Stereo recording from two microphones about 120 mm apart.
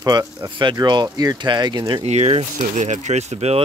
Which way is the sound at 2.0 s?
60° right (ahead or behind).